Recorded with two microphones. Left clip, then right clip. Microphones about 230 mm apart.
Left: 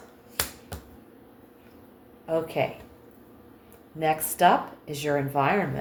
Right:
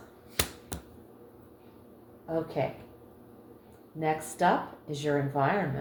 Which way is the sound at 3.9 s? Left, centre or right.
Left.